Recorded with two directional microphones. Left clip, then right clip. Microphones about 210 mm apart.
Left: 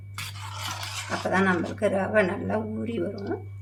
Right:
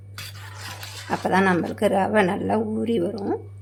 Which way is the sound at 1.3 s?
45° right (ahead or behind).